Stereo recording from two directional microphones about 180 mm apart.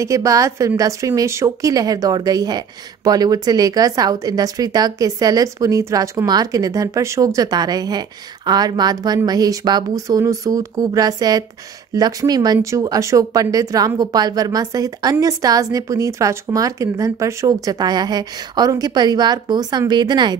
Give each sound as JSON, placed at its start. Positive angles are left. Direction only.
{"t": 0.0, "sound": "a woman's voice", "side_deg": -20}